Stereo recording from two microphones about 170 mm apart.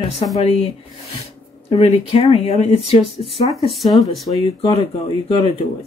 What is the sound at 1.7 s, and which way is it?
Speech, 35° left (ahead or behind).